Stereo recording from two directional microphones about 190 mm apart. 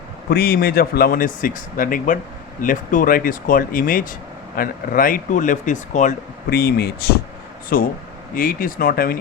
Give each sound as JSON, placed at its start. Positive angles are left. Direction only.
{"t": 0.3, "sound": "speech", "side_deg": 55}
{"t": 6.5, "sound": "speech", "side_deg": 55}